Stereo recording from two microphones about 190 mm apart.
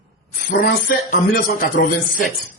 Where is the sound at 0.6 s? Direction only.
50° left (ahead or behind).